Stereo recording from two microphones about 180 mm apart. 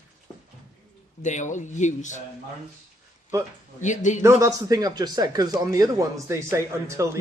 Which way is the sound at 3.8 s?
45° left (ahead or behind).